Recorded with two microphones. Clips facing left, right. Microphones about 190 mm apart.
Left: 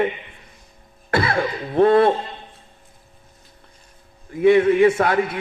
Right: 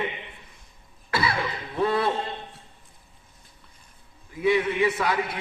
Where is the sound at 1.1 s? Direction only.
50° left (ahead or behind).